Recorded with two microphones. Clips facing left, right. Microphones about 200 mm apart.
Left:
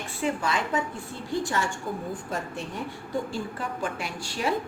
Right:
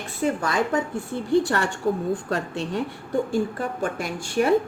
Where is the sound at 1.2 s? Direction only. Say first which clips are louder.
Right 7 dB; 60° right (ahead or behind).